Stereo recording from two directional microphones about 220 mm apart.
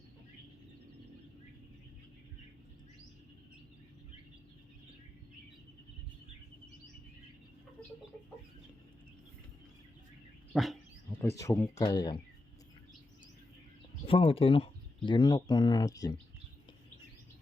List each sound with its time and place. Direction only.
10.5 s dog: centre (ahead or behind)
11.3 s speech: 15° left (ahead or behind)
14.0 s speech: 25° left (ahead or behind)